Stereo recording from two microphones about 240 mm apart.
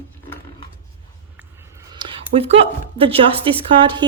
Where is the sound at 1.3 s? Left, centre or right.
Centre.